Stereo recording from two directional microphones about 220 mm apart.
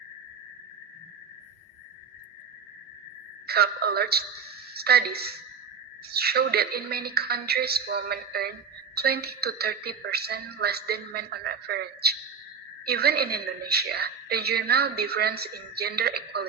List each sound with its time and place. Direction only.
3.4 s a woman's voice: 45° right (ahead or behind)